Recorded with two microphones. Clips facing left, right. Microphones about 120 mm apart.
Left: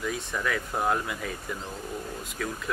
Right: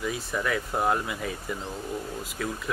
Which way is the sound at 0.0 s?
5° right (ahead or behind).